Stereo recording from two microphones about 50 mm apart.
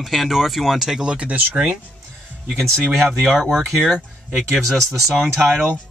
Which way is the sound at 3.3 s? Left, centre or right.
Centre.